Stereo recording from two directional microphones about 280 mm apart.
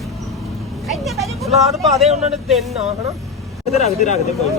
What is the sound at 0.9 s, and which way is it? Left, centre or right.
Vehicle, centre.